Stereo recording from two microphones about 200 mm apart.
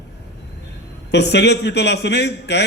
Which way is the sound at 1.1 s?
55° left (ahead or behind).